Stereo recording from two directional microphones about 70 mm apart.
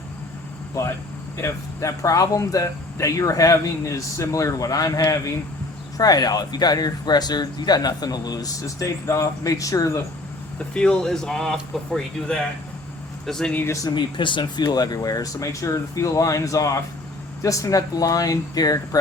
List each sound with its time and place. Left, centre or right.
0.7 s speech: left
10.8 s speech: centre
14.5 s speech: left